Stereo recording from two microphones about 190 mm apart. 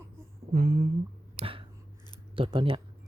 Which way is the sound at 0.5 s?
45° right (ahead or behind).